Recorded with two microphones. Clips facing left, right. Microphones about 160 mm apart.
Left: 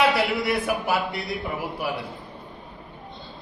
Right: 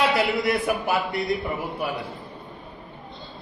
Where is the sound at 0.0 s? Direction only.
Centre (ahead or behind).